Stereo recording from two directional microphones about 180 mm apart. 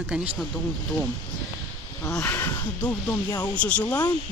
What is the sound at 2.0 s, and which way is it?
Speech, 10° left (ahead or behind).